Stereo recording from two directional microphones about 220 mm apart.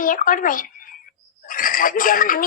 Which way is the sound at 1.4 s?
40° left (ahead or behind).